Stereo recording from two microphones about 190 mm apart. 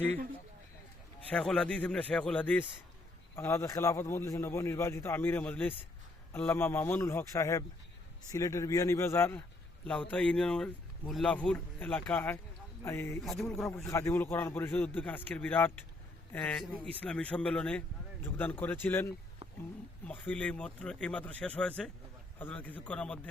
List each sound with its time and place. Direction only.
1.3 s a man's voice: 5° left (ahead or behind)
13.2 s a man's voice: centre (ahead or behind)
13.8 s a man's voice: 15° left (ahead or behind)